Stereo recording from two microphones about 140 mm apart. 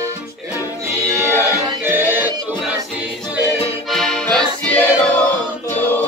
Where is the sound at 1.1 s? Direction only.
15° right (ahead or behind).